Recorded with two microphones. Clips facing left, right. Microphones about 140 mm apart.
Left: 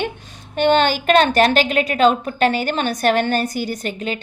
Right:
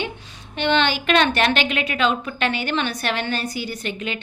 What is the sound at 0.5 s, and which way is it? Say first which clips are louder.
A woman's voice: left 5 dB; 45° left (ahead or behind).